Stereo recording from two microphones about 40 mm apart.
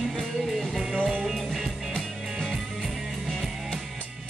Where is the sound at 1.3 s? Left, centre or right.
Centre.